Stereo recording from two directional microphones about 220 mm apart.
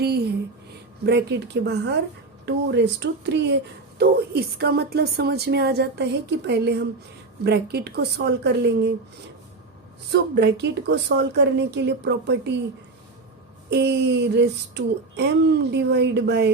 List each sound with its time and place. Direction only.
0.0 s a sound: 45° right (ahead or behind)
1.0 s speech: 50° right (ahead or behind)
7.4 s speech: 45° right (ahead or behind)
10.1 s speech: 50° right (ahead or behind)
13.7 s speech: 50° right (ahead or behind)